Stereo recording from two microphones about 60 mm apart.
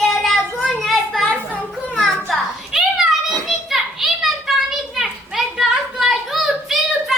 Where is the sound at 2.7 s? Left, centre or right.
Centre.